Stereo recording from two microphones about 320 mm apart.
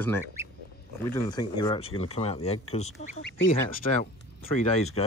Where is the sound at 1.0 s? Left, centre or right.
Centre.